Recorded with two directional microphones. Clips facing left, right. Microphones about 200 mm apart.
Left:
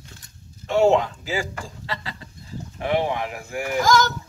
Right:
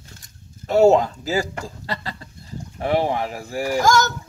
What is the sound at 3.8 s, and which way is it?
Speech, 45° right (ahead or behind).